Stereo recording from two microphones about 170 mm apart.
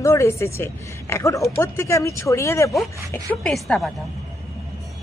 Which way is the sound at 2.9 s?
20° right (ahead or behind).